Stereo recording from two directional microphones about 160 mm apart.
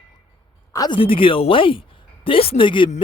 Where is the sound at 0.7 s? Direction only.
25° left (ahead or behind).